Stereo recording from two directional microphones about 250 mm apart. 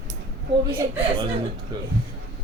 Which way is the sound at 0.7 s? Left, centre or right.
Centre.